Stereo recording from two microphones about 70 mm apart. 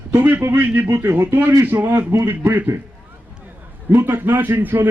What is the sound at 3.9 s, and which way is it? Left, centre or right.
Speech, right.